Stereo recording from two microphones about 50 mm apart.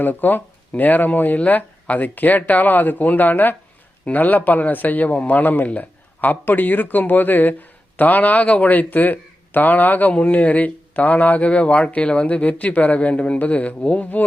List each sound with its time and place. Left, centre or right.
0.0 s a man's voice: left